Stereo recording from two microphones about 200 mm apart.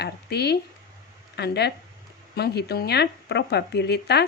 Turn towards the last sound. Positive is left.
turn(degrees=55)  # may be behind; listen again after turning